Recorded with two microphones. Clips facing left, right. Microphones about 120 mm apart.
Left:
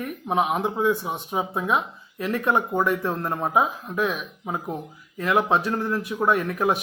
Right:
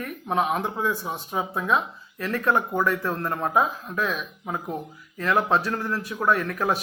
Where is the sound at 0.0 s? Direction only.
15° left (ahead or behind).